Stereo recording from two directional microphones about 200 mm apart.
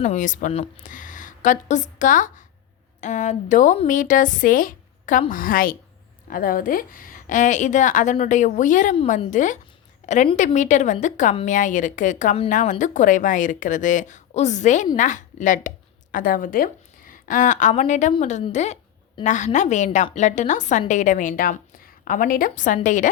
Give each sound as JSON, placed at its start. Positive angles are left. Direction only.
{"t": 0.0, "sound": "a woman's voice", "side_deg": 35}